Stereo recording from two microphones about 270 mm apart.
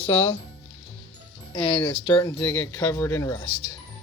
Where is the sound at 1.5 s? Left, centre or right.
Centre.